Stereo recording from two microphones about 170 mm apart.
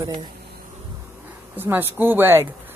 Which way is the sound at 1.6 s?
10° right (ahead or behind).